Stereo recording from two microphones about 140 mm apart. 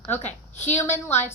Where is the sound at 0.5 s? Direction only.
15° left (ahead or behind).